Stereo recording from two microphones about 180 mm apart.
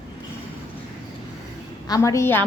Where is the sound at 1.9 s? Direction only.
15° left (ahead or behind).